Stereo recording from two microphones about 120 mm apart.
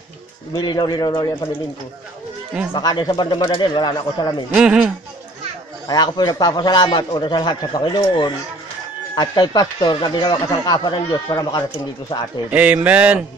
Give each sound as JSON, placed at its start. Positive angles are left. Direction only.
{"t": 0.6, "sound": "speech", "side_deg": 35}
{"t": 2.7, "sound": "speech", "side_deg": 40}
{"t": 4.5, "sound": "speech", "side_deg": -10}
{"t": 5.9, "sound": "speech", "side_deg": 35}
{"t": 12.4, "sound": "speech", "side_deg": -15}